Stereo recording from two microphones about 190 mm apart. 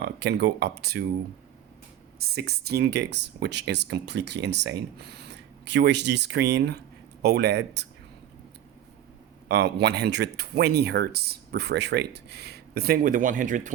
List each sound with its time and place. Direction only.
0.0 s speech: 65° right (ahead or behind)
2.1 s speech: 55° right (ahead or behind)
9.5 s speech: 60° right (ahead or behind); by 13.7 s 45° right (ahead or behind)